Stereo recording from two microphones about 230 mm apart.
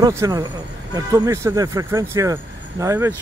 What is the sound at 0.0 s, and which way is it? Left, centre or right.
A man's voice, centre.